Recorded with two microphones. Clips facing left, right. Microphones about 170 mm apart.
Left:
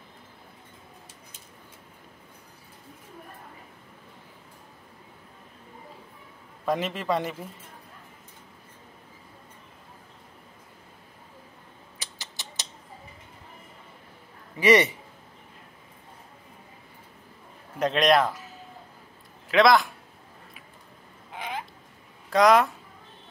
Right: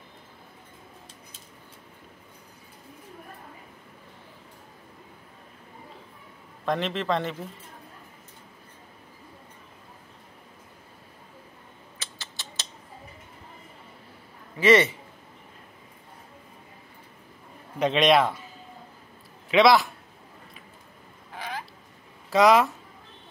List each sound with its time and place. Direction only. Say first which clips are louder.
6.6 s a man's voice: even; 10° left (ahead or behind)
12.0 s mechanisms: even; 15° left (ahead or behind)
14.6 s a man's voice: right 1 dB; 15° left (ahead or behind)
17.7 s a man's voice: right 1 dB; centre (ahead or behind)
19.5 s a man's voice: right 1 dB; centre (ahead or behind)
21.3 s a sound: left 1 dB; 20° left (ahead or behind)
22.3 s a man's voice: even; centre (ahead or behind)